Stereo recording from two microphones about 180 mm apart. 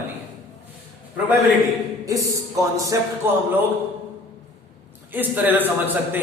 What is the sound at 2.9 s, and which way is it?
Speech, 15° right (ahead or behind).